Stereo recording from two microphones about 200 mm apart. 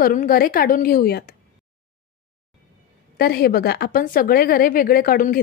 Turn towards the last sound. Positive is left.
turn(degrees=45)  # may be behind; listen again after turning